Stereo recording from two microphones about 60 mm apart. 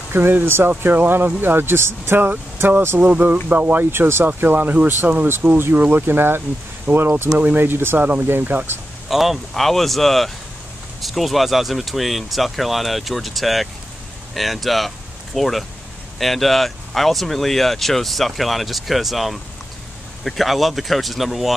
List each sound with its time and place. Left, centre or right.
0.1 s speech: right
3.4 s speech: right
8.0 s speech: right
9.1 s speech: centre